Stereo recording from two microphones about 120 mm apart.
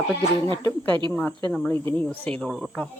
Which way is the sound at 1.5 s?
10° left (ahead or behind).